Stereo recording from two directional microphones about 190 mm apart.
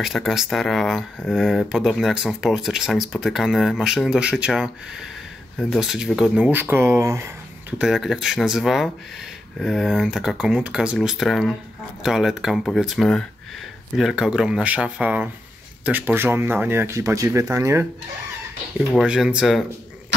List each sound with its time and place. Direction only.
0.0 s speech: centre (ahead or behind)
7.8 s speech: centre (ahead or behind)
18.9 s speech: 5° right (ahead or behind)